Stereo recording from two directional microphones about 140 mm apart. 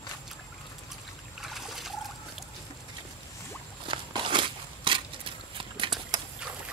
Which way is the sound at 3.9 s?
35° right (ahead or behind).